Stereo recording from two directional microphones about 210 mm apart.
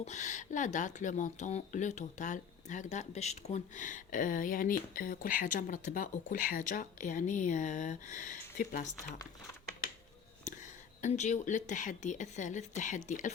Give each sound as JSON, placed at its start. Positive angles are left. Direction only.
{"t": 0.0, "sound": "speech", "side_deg": 35}
{"t": 10.4, "sound": "speech", "side_deg": 35}